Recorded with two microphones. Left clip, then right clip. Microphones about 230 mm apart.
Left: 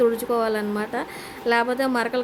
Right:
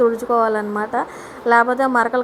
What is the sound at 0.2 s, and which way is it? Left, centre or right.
Speech, centre.